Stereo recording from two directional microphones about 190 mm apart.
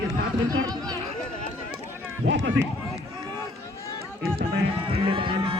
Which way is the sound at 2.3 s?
80° right.